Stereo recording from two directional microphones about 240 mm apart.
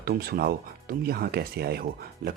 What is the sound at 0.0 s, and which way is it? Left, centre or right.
Speech, right.